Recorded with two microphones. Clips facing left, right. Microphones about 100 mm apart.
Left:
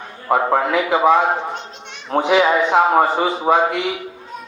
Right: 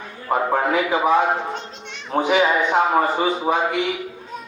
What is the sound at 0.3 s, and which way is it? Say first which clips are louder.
Speech: left 3 dB; 70° left (ahead or behind).